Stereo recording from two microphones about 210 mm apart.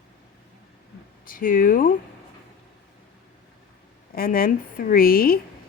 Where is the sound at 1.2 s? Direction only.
40° left (ahead or behind).